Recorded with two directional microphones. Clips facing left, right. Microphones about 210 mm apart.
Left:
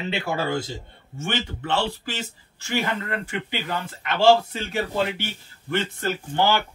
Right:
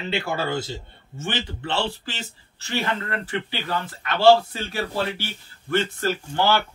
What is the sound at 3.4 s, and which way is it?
Speech, 20° left (ahead or behind).